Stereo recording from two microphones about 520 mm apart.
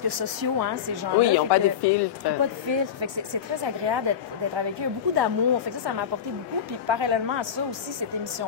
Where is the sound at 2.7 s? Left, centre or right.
Right.